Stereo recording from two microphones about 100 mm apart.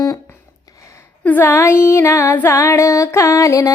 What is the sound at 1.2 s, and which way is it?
Female singing, 20° left (ahead or behind).